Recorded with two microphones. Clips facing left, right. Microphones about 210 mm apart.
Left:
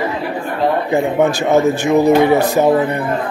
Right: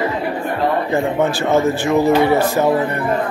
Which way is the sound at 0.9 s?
15° left (ahead or behind).